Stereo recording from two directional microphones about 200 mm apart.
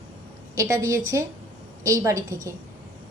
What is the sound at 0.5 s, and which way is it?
A woman's voice, 15° right (ahead or behind).